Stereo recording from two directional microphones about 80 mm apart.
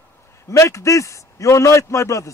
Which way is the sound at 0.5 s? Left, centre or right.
Left.